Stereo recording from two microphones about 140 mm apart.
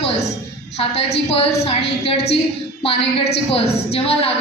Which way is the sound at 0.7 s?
45° left (ahead or behind).